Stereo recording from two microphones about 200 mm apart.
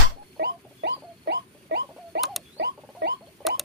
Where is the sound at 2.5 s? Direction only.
55° right (ahead or behind).